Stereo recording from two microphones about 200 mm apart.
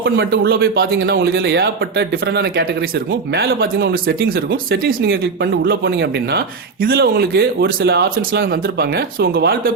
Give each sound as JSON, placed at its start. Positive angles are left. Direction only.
{"t": 0.0, "sound": "speech", "side_deg": -50}